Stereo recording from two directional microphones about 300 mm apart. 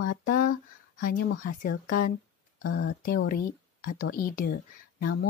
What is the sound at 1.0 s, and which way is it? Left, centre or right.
Speech, left.